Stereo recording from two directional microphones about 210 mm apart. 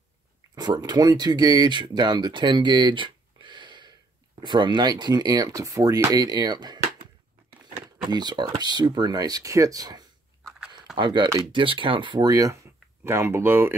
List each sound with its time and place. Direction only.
0.6 s speech: 20° right (ahead or behind)
8.0 s speech: 20° right (ahead or behind)